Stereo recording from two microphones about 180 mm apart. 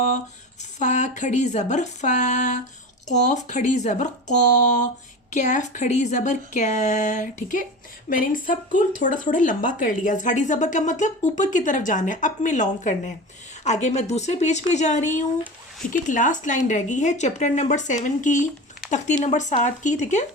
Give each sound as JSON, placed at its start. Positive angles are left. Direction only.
{"t": 0.8, "sound": "speech", "side_deg": 40}